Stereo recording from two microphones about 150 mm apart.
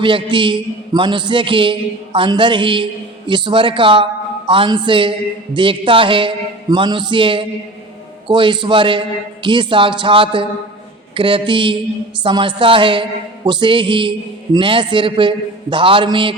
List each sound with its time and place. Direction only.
0.0 s a man's voice: 35° right (ahead or behind)